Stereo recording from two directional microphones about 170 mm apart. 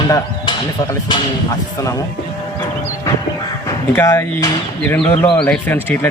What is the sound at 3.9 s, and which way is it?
Speech, 15° left (ahead or behind).